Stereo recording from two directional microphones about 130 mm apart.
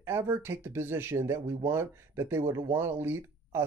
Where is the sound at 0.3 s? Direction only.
20° right (ahead or behind).